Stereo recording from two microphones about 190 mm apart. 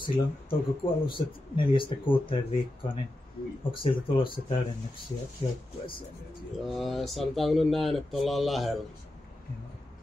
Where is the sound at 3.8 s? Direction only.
25° left (ahead or behind).